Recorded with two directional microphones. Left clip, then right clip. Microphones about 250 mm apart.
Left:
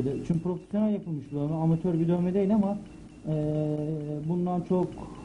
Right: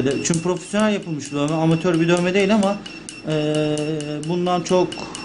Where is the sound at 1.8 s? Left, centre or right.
Centre.